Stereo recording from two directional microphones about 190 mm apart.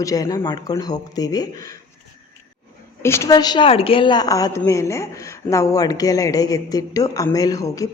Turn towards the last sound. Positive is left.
turn(degrees=20)  # may be behind; listen again after turning